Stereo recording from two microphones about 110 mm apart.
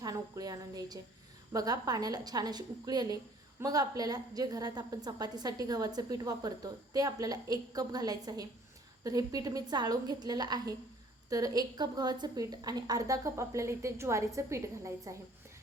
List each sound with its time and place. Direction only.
0.0 s a woman's voice: 35° right (ahead or behind)